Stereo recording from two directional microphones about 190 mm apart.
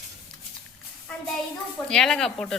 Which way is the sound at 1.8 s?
5° left (ahead or behind).